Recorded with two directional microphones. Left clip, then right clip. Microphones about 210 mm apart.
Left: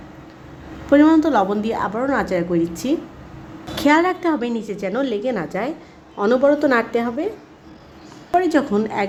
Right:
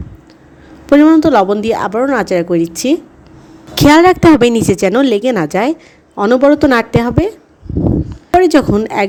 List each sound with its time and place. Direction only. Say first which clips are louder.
0.9 s a woman's voice: right 6 dB; 35° right (ahead or behind)
8.4 s a woman's voice: right 8 dB; 40° right (ahead or behind)